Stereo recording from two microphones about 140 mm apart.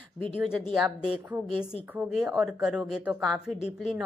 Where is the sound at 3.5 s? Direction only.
50° left (ahead or behind).